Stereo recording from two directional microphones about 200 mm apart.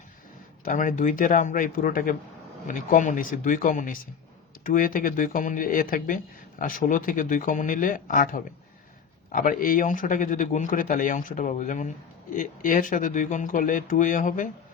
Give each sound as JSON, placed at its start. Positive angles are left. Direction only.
{"t": 0.6, "sound": "speech", "side_deg": 40}